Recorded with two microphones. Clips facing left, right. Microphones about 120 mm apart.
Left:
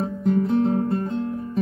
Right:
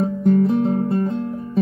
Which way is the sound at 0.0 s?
Centre (ahead or behind).